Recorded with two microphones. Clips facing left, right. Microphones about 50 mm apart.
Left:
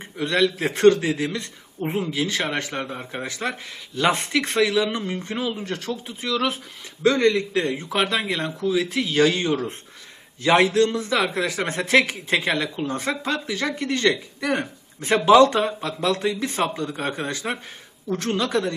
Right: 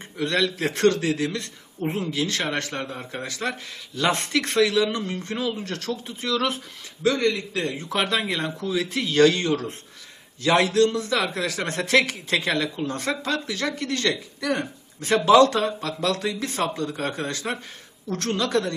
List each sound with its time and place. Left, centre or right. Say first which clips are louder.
0.2 s speech: left 2 dB; centre
7.0 s a man's voice: left 4 dB; left
7.9 s a man's voice: left 1 dB; centre